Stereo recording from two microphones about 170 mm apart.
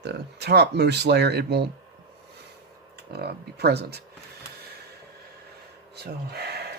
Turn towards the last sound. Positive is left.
turn(degrees=-70)  # may be behind; listen again after turning